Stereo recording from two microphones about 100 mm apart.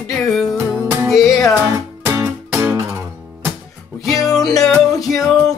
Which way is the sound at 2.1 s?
25° right (ahead or behind).